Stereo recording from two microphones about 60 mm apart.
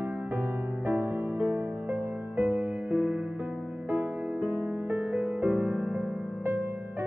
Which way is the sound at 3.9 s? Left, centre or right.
Right.